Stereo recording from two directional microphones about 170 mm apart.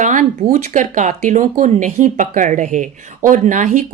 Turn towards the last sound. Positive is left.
turn(degrees=-45)  # may be behind; listen again after turning